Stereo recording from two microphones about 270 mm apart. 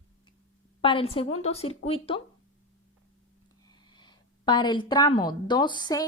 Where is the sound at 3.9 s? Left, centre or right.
Centre.